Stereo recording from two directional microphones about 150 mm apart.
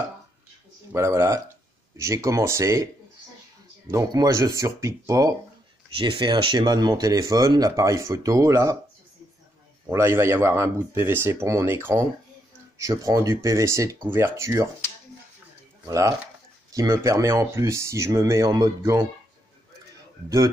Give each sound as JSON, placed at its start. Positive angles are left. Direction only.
{"t": 0.9, "sound": "speech", "side_deg": -20}
{"t": 3.9, "sound": "speech", "side_deg": -20}
{"t": 5.9, "sound": "speech", "side_deg": -30}
{"t": 9.8, "sound": "speech", "side_deg": -15}
{"t": 15.8, "sound": "speech", "side_deg": -20}
{"t": 20.2, "sound": "speech", "side_deg": -20}